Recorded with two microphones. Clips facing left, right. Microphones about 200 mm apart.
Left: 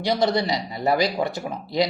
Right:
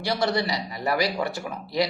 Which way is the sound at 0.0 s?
25° left (ahead or behind).